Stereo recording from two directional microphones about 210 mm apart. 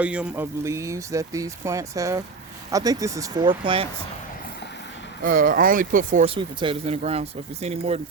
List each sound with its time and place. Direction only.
0.0 s speech: 5° right (ahead or behind); by 3.8 s 25° right (ahead or behind)
5.2 s speech: 40° right (ahead or behind)
6.3 s speech: 25° right (ahead or behind)